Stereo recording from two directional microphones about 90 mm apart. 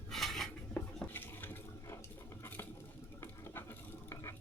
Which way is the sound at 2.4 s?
25° left (ahead or behind).